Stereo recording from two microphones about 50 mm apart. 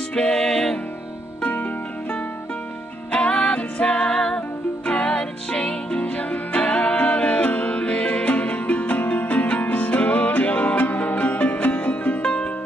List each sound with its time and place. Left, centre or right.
0.1 s music: centre
1.4 s music: left
3.1 s music: centre
12.2 s music: left